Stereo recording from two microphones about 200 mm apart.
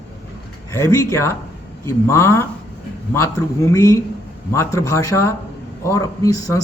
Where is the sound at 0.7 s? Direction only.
15° left (ahead or behind).